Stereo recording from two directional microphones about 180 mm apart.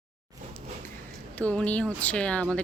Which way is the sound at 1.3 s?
10° left (ahead or behind).